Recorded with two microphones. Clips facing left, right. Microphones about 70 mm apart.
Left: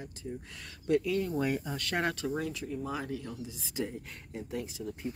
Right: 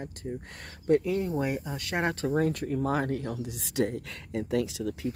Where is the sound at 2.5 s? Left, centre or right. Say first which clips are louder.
Right 8 dB; right.